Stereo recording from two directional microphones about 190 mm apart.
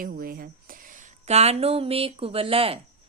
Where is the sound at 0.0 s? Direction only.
50° right (ahead or behind).